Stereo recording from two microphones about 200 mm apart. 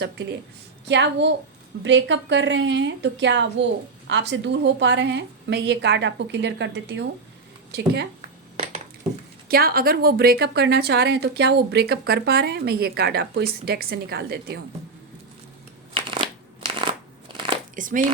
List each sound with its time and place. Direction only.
0.0 s a woman's voice: 55° right (ahead or behind)
9.5 s a woman's voice: 50° right (ahead or behind)
16.0 s crushing: 25° right (ahead or behind)
17.3 s crumpling: 25° right (ahead or behind)
17.7 s speech: 40° right (ahead or behind)